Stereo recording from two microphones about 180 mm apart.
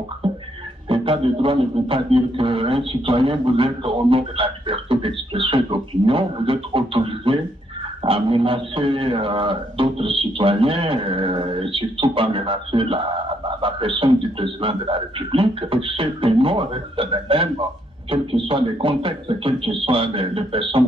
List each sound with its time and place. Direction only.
0.2 s music: 30° right (ahead or behind)
0.8 s speech: 30° right (ahead or behind)